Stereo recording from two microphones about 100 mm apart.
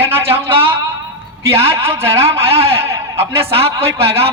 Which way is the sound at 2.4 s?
80° right.